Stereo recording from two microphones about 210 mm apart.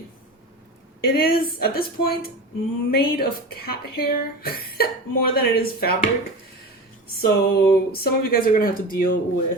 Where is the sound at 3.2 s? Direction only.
45° left (ahead or behind).